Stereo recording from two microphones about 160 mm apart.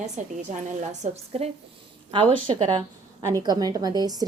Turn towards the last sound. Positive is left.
turn(degrees=-25)  # may be behind; listen again after turning